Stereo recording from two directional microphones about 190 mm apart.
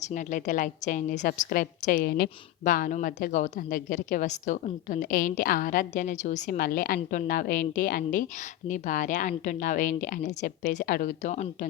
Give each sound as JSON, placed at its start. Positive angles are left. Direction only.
{"t": 0.0, "sound": "a woman's voice", "side_deg": 40}